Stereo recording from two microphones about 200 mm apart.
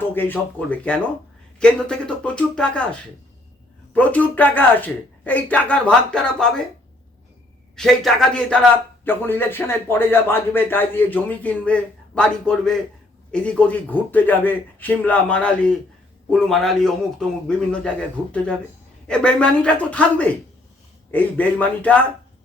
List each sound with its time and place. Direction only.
0.0 s a man's voice: 10° left (ahead or behind)
3.9 s speech: 5° left (ahead or behind)
7.8 s a man's voice: 5° left (ahead or behind)